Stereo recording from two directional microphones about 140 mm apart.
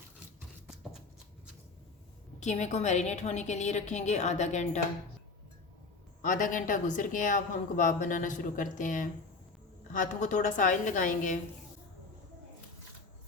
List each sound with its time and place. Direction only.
2.4 s a woman's voice: 55° left (ahead or behind)
6.2 s a woman's voice: 70° left (ahead or behind)